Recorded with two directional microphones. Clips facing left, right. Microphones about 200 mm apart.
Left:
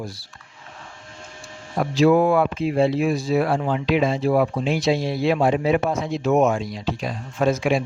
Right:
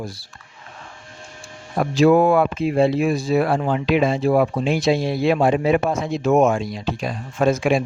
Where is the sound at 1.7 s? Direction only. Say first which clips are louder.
Right 2 dB; 50° right (ahead or behind).